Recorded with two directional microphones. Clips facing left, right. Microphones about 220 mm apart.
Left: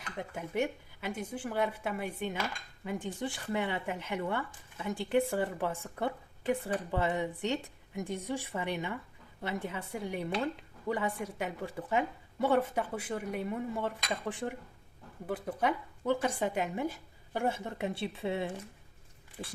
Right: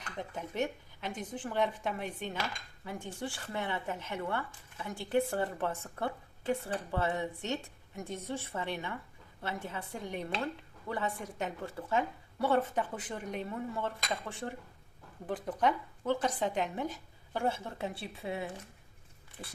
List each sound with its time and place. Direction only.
0.2 s speech: 10° left (ahead or behind)
15.3 s speech: 5° left (ahead or behind); by 18.5 s 25° left (ahead or behind)